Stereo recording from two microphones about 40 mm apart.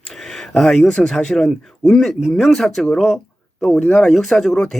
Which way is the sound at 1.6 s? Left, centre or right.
Centre.